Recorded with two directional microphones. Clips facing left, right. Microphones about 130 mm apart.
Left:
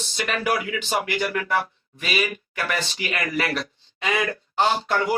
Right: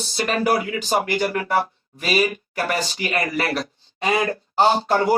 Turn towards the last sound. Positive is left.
turn(degrees=-35)  # may be behind; listen again after turning